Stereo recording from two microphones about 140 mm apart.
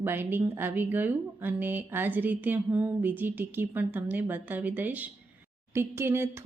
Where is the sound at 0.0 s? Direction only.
15° right (ahead or behind).